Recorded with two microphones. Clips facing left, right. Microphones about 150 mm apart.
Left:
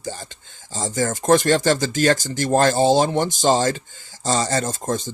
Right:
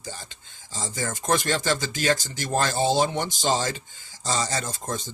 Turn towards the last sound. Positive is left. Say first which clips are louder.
# left 7 dB
turn(degrees=45)  # may be behind; listen again after turning